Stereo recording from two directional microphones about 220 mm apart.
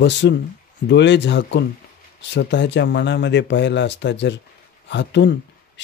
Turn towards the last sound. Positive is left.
turn(degrees=50)  # may be behind; listen again after turning